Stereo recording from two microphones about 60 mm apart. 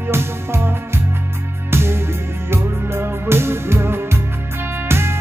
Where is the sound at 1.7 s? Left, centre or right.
Right.